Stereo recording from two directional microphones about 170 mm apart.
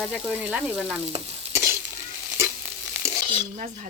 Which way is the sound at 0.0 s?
5° right (ahead or behind).